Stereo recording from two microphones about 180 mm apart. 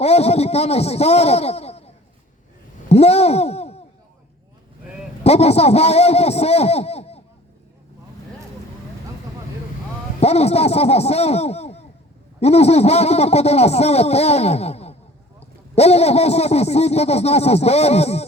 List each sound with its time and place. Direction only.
0.0 s speech: 35° left (ahead or behind)
2.9 s speech: 35° left (ahead or behind)
5.2 s speech: 35° left (ahead or behind)
10.2 s speech: 35° left (ahead or behind)